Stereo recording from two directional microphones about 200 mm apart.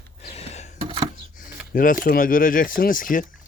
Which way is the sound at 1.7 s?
45° left (ahead or behind).